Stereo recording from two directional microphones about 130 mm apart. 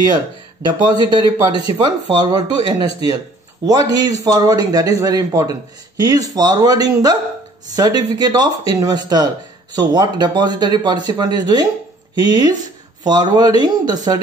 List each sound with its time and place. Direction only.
0.8 s speech: 35° right (ahead or behind)